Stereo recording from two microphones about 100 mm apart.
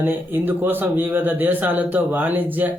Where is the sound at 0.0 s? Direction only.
20° right (ahead or behind).